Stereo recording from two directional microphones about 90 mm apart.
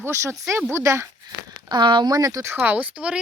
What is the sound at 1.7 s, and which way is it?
Speech, 60° right (ahead or behind).